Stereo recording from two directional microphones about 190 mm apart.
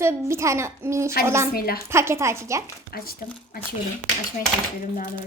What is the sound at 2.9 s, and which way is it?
Speech, 50° left (ahead or behind).